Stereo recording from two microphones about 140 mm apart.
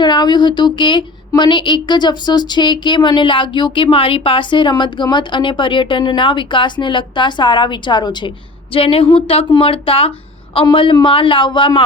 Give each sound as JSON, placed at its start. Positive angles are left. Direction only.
{"t": 0.0, "sound": "a woman's voice", "side_deg": 30}